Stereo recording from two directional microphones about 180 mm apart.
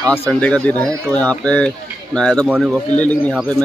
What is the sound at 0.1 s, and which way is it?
Speech, 10° left (ahead or behind).